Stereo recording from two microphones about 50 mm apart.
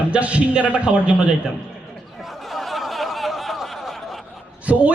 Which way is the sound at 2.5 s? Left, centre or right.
Centre.